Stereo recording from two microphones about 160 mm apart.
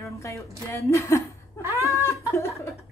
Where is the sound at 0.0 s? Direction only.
15° left (ahead or behind).